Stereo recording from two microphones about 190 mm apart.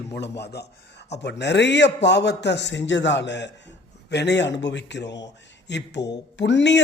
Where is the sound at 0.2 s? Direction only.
60° left (ahead or behind).